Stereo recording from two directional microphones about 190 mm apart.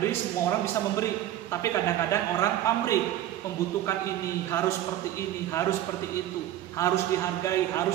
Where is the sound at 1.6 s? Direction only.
15° left (ahead or behind).